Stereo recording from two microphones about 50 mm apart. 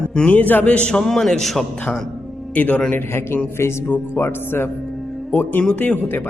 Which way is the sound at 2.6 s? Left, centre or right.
Left.